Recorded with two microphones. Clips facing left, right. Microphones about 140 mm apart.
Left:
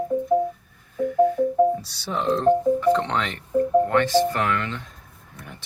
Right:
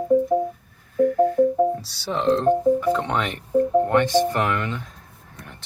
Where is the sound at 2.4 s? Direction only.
10° right (ahead or behind).